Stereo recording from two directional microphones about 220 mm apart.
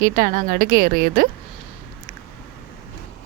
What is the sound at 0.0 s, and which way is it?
A woman's voice, 40° right (ahead or behind).